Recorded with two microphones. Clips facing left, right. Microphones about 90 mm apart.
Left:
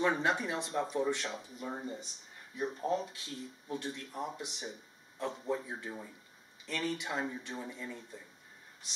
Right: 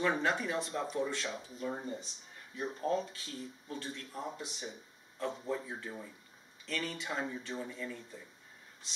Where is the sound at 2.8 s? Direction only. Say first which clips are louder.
Right 2 dB; 15° left (ahead or behind).